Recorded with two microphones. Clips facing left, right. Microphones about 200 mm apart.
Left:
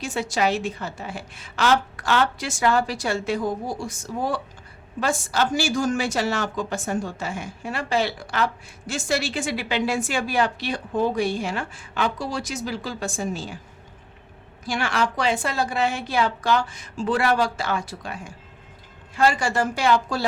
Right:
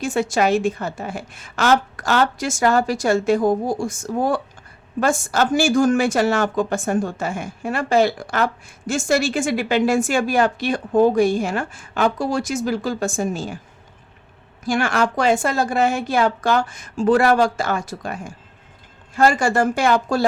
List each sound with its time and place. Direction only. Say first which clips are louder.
0.0 s a woman's voice: right 5 dB; 50° right (ahead or behind)
14.6 s a woman's voice: right 5 dB; 45° right (ahead or behind)